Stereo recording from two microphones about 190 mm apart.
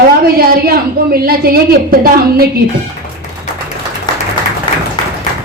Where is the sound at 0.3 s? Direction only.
50° right (ahead or behind).